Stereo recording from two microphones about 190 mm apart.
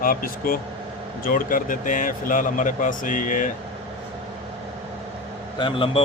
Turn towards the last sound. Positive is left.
turn(degrees=25)  # may be behind; listen again after turning